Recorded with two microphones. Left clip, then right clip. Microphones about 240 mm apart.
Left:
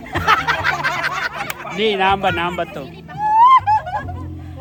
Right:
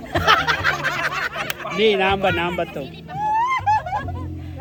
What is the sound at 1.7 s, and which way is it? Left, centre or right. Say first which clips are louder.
Speech: left 1 dB; centre.